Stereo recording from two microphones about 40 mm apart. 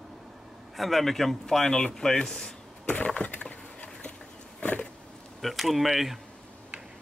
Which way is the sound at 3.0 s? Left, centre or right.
Left.